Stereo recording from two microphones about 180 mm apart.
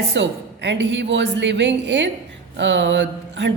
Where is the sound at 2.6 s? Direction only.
90° right.